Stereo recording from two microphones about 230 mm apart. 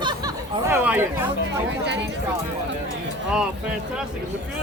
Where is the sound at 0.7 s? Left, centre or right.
Centre.